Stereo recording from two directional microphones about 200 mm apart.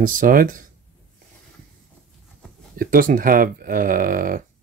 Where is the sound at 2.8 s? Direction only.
45° right (ahead or behind).